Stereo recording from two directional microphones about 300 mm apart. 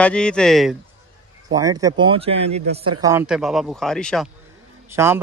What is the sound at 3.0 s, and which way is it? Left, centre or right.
A man's voice, centre.